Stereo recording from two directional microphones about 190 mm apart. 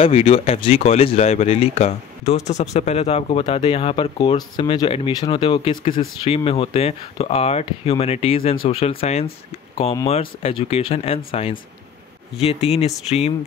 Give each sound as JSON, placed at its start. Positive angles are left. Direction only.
{"t": 0.0, "sound": "speech", "side_deg": 30}